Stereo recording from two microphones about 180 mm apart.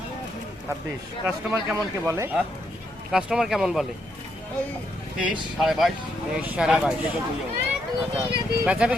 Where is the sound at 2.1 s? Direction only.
15° right (ahead or behind).